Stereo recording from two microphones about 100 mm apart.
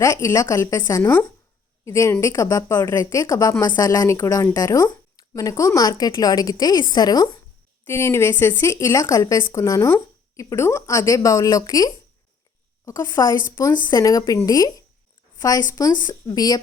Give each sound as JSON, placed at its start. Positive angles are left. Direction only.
{"t": 0.0, "sound": "a woman's voice", "side_deg": 30}
{"t": 7.9, "sound": "a woman's voice", "side_deg": 25}